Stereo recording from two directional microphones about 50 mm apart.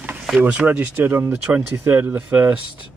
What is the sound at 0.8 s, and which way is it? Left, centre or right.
Speech, right.